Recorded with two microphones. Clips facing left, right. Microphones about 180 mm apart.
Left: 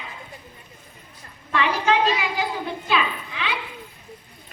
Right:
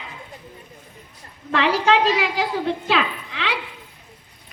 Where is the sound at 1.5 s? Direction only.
90° right.